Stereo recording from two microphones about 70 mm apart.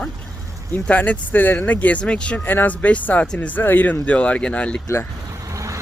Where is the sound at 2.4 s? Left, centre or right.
Left.